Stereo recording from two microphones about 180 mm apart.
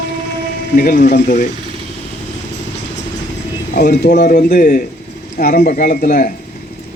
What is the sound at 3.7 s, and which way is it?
Speech, 70° left (ahead or behind).